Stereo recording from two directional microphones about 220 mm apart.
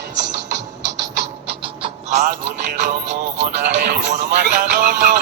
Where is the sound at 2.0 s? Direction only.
30° right (ahead or behind).